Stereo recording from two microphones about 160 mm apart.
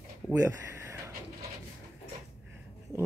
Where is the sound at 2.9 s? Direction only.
20° right (ahead or behind).